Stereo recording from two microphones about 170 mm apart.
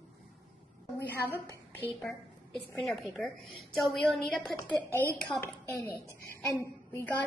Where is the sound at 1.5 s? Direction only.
10° left (ahead or behind).